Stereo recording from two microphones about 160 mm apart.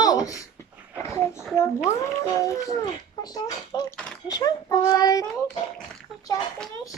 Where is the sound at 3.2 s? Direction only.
25° left (ahead or behind).